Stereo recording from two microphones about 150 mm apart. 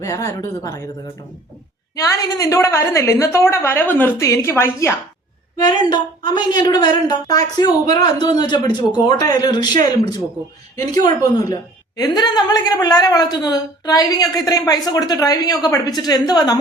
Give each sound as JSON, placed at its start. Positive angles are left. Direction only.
{"t": 0.0, "sound": "a woman's voice", "side_deg": 20}
{"t": 2.0, "sound": "a woman's voice", "side_deg": 25}
{"t": 5.6, "sound": "a woman's voice", "side_deg": 25}